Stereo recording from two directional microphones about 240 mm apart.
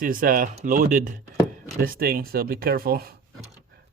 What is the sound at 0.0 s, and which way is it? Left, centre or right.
Speech, right.